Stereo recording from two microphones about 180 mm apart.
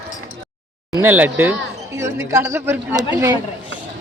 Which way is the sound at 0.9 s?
10° right (ahead or behind).